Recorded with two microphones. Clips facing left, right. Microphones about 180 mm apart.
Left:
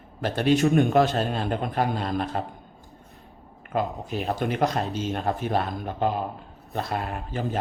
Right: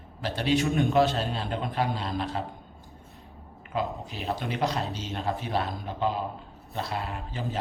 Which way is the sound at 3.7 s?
50° left (ahead or behind).